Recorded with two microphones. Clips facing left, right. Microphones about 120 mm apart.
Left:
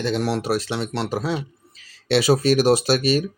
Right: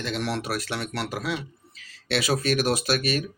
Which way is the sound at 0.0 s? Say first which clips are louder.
Left 6 dB; 35° left (ahead or behind).